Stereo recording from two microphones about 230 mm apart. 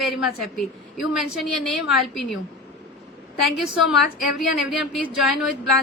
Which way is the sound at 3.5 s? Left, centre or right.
Centre.